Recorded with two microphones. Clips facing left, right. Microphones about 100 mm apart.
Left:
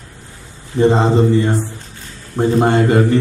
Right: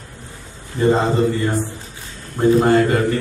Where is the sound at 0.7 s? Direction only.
20° left (ahead or behind).